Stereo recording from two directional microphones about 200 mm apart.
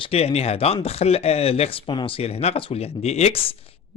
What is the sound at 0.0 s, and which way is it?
Speech, 30° left (ahead or behind).